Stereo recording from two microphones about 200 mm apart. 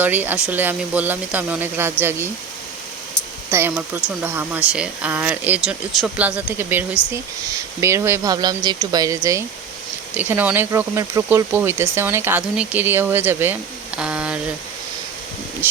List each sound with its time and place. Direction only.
0.0 s speech: 10° right (ahead or behind)
3.5 s speech: 10° right (ahead or behind)